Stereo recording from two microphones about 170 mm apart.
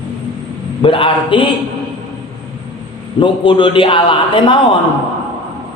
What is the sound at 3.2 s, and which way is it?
A man's voice, 30° left (ahead or behind).